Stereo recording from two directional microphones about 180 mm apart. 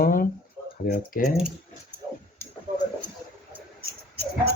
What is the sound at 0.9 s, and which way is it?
Speech, 55° left (ahead or behind).